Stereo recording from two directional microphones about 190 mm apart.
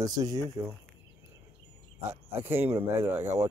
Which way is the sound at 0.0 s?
20° right (ahead or behind).